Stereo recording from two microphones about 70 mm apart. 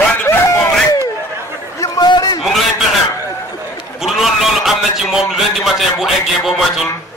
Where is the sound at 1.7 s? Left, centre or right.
Left.